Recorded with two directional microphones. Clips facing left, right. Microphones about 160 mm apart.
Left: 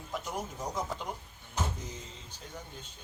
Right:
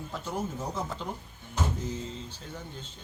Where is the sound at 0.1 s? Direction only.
15° left (ahead or behind).